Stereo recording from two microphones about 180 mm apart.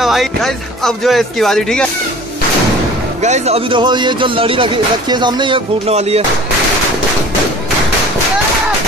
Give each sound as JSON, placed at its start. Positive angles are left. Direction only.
{"t": 0.0, "sound": "speech", "side_deg": 0}
{"t": 3.2, "sound": "speech", "side_deg": -40}